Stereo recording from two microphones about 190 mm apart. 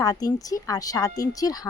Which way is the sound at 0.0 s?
20° left (ahead or behind).